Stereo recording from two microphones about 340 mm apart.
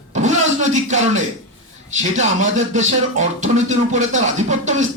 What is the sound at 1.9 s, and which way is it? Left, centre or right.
Speech, right.